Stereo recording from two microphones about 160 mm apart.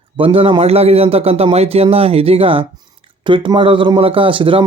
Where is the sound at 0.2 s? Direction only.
35° right (ahead or behind).